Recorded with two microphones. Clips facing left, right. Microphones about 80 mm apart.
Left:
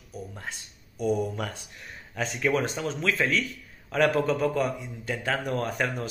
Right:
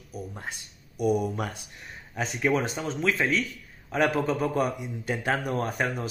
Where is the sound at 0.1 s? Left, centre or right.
Centre.